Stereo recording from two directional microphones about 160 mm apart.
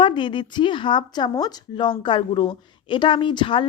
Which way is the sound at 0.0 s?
30° left (ahead or behind).